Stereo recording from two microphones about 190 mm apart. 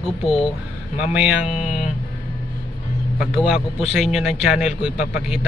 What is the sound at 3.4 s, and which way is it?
Speech, 5° right (ahead or behind).